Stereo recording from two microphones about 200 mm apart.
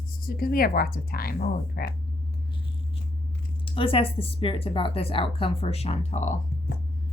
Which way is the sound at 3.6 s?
25° left (ahead or behind).